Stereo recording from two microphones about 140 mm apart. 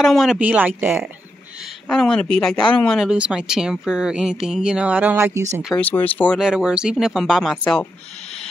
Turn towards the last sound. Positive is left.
turn(degrees=0)  # may be behind; listen again after turning